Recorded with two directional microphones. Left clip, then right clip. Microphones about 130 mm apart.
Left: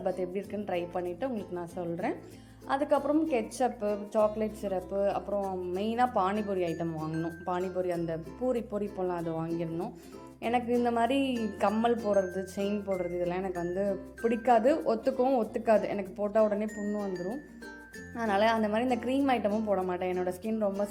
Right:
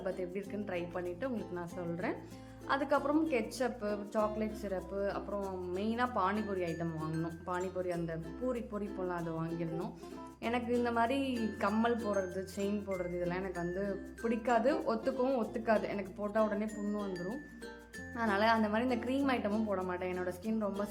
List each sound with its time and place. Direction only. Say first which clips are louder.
0.0 s a woman's voice: left 6 dB; 25° left (ahead or behind)
6.8 s speech: left 5 dB; 15° left (ahead or behind)
7.4 s speech: left 6 dB; 30° left (ahead or behind)
9.6 s a woman's voice: left 5 dB; 20° left (ahead or behind)
16.4 s speech: left 6 dB; 20° left (ahead or behind)
18.2 s a woman's voice: left 4 dB; 25° left (ahead or behind)
19.7 s a woman's voice: left 6 dB; 35° left (ahead or behind)